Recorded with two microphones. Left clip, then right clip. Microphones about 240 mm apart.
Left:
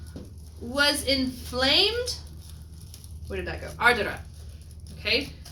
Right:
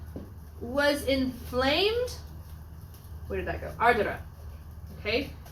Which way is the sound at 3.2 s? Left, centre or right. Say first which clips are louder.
Even; left.